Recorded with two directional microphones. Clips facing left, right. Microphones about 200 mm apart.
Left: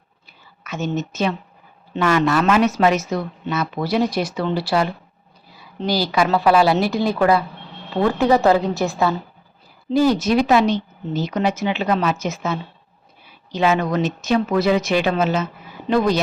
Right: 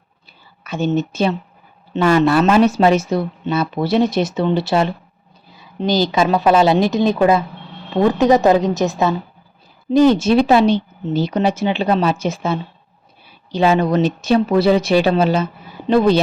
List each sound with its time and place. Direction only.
0.6 s a woman's voice: 30° right (ahead or behind)